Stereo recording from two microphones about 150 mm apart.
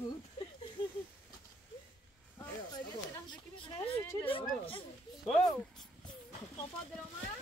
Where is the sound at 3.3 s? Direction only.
25° left (ahead or behind).